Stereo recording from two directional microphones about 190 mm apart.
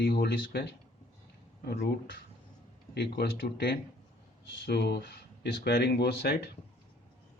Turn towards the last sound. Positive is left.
turn(degrees=60)  # may be behind; listen again after turning